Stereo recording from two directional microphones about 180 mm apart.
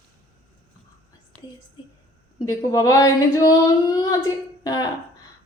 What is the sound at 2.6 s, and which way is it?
A woman's voice, 20° left (ahead or behind).